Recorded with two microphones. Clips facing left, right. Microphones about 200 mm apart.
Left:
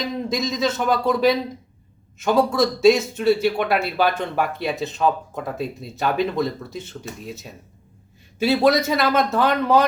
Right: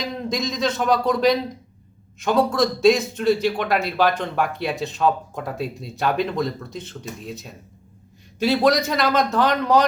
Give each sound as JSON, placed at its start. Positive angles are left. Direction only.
{"t": 0.0, "sound": "a man's voice", "side_deg": 5}